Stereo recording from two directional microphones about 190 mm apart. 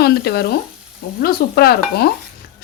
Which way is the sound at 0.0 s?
55° left (ahead or behind).